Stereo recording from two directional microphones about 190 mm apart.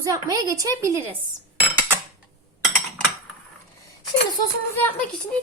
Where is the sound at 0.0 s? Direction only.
20° right (ahead or behind).